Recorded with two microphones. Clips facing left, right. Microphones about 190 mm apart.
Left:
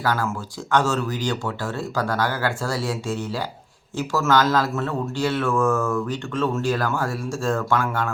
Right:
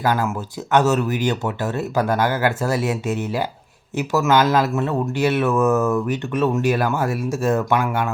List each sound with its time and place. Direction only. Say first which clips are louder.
0.0 s speech: right 3 dB; 20° right (ahead or behind)